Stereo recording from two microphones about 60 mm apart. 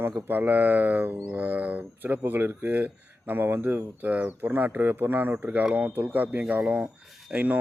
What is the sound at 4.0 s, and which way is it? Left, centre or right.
Speech, right.